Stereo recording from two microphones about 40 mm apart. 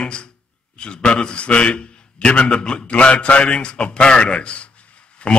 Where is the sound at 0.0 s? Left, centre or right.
Left.